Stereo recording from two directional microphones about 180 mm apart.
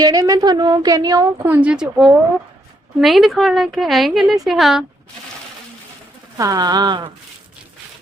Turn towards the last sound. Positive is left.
turn(degrees=-25)  # may be behind; listen again after turning